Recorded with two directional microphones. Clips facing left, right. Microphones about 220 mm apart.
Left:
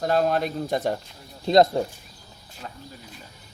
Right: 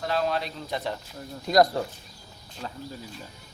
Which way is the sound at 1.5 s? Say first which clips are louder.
Left 3 dB; 25° left (ahead or behind).